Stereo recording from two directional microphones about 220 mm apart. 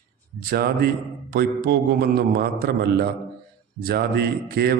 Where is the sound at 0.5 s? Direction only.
45° right (ahead or behind).